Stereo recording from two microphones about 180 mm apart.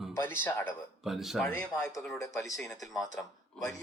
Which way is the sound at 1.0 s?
Centre (ahead or behind).